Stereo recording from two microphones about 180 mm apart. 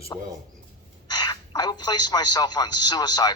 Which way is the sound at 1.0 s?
25° left (ahead or behind).